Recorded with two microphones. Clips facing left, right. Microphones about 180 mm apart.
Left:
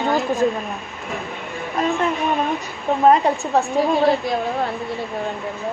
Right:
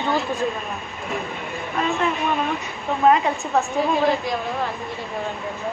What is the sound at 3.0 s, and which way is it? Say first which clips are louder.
Speech: left 2 dB; 35° left (ahead or behind).